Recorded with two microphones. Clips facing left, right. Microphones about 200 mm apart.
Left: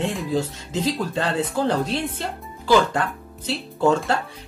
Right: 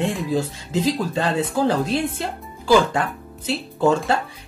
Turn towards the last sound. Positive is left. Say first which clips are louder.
# right 1 dB
turn(degrees=-5)  # may be behind; listen again after turning